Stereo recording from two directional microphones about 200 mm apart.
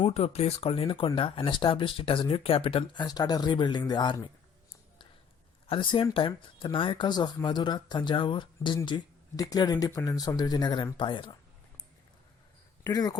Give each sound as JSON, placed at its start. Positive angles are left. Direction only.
{"t": 0.0, "sound": "speech", "side_deg": 30}
{"t": 5.6, "sound": "speech", "side_deg": 25}
{"t": 12.8, "sound": "speech", "side_deg": 20}